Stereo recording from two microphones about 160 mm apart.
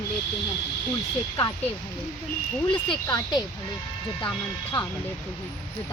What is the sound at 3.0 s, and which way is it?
Speech, 25° left (ahead or behind).